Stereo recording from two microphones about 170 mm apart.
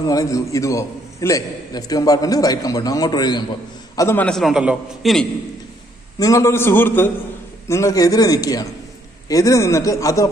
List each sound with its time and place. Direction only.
0.0 s a man's voice: 20° left (ahead or behind)
4.3 s a man's voice: centre (ahead or behind)
6.1 s a man's voice: 20° left (ahead or behind)